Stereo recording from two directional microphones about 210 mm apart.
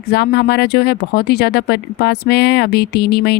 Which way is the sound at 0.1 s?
50° left (ahead or behind).